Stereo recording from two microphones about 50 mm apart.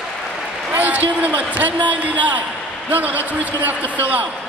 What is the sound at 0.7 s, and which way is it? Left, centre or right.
A man's voice, right.